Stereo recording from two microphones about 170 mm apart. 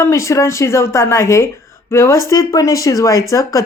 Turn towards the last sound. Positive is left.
turn(degrees=20)  # may be behind; listen again after turning